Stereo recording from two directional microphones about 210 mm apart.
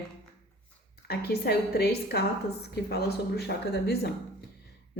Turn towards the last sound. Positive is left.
turn(degrees=50)  # may be behind; listen again after turning